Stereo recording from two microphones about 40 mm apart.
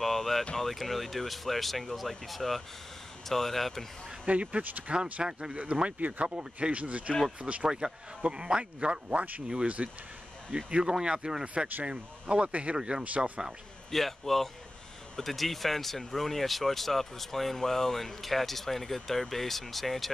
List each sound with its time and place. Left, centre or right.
0.0 s a sound: centre
0.6 s speech: centre
4.3 s speech: right
5.5 s speech: right
7.6 s speech: centre
11.4 s speech: right
12.7 s speech: centre
13.0 s speech: right
13.8 s speech: centre